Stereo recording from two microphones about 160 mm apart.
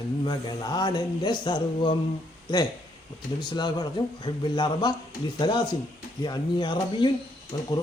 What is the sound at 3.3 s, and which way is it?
Speech, 25° left (ahead or behind).